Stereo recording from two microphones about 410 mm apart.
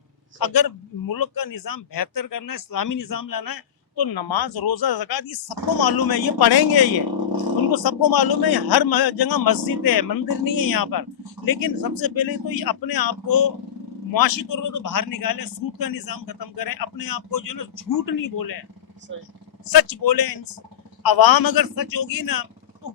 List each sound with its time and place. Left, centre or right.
0.3 s a man's voice: left
19.6 s a man's voice: left